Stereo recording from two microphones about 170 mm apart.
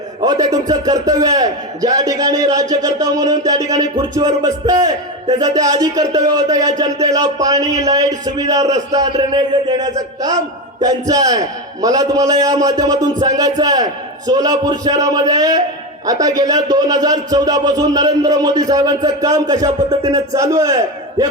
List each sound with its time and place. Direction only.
0.2 s speech: 20° right (ahead or behind)